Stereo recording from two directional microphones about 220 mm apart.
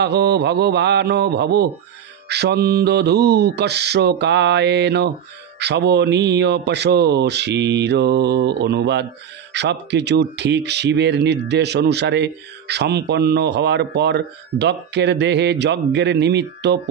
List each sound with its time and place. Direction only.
0.0 s speech: 50° right (ahead or behind)